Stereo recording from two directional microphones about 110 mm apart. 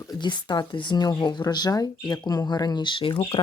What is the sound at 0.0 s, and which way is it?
Speech, 40° left (ahead or behind).